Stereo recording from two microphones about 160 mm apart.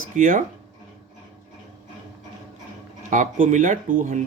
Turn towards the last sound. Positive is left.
turn(degrees=-55)  # may be behind; listen again after turning